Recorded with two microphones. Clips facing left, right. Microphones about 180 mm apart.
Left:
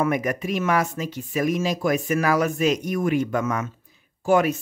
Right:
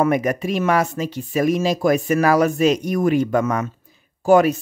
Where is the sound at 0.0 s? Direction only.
35° right (ahead or behind).